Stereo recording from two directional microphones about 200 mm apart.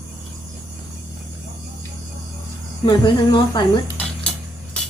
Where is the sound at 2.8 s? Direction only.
20° left (ahead or behind).